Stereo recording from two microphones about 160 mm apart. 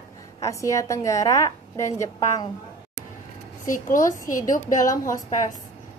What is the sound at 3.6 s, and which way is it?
A woman's voice, 55° left (ahead or behind).